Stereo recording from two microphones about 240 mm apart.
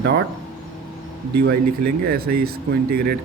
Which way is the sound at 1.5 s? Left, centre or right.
Right.